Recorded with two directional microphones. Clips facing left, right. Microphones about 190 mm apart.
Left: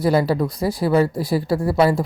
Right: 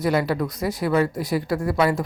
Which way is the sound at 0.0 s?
35° left (ahead or behind).